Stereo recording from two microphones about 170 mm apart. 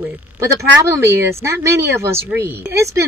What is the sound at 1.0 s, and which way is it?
Speech, 15° right (ahead or behind).